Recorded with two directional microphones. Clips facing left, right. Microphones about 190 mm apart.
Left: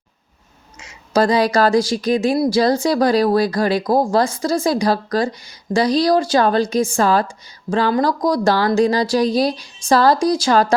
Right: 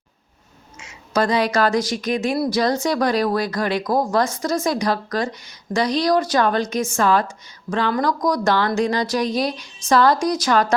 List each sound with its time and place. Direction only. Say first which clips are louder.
0.8 s speech: left 4 dB; 35° left (ahead or behind)